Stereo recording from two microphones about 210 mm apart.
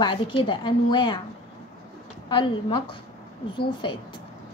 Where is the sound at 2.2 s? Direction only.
25° left (ahead or behind).